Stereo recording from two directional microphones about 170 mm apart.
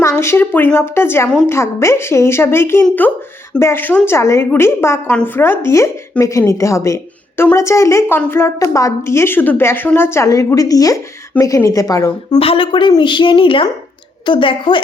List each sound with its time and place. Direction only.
0.2 s a woman's voice: 15° left (ahead or behind)
12.4 s a woman's voice: 30° left (ahead or behind)